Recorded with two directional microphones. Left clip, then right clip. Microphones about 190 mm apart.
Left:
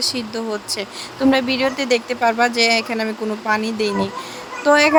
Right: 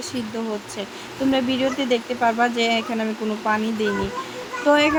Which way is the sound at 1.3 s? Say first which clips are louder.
Left 3 dB; 40° left (ahead or behind).